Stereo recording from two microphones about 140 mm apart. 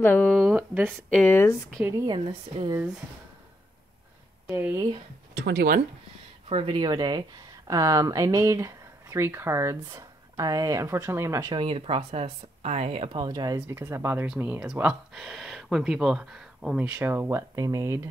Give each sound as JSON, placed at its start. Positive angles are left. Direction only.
{"t": 0.0, "sound": "speech", "side_deg": 15}
{"t": 0.3, "sound": "speech", "side_deg": 0}
{"t": 1.1, "sound": "speech", "side_deg": 15}
{"t": 2.0, "sound": "speech", "side_deg": -35}
{"t": 4.5, "sound": "speech", "side_deg": -20}
{"t": 6.5, "sound": "speech", "side_deg": -40}
{"t": 11.5, "sound": "speech", "side_deg": -40}